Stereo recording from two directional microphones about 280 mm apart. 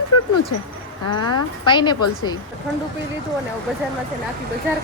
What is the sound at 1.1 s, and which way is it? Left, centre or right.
A woman's voice, centre.